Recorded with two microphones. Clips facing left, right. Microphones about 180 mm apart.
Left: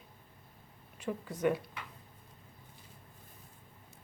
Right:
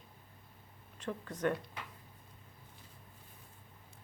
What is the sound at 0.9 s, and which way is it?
Speech, 10° left (ahead or behind).